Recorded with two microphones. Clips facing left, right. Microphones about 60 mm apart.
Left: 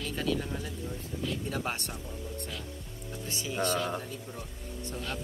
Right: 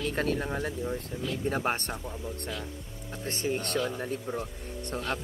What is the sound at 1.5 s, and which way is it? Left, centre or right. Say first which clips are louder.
Speech: right 5 dB; right.